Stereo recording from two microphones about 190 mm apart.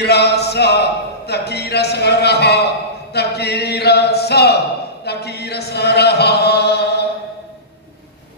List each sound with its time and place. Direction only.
0.0 s speech: 60° left (ahead or behind)